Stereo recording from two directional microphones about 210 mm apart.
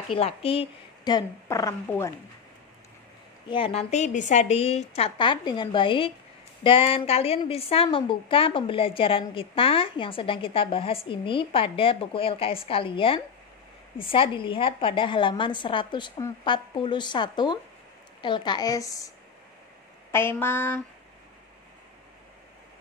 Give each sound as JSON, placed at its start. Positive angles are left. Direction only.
{"t": 0.1, "sound": "a woman's voice", "side_deg": 25}
{"t": 3.4, "sound": "a woman's voice", "side_deg": 25}